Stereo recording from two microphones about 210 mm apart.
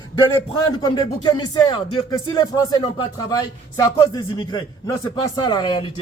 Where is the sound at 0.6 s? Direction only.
20° left (ahead or behind).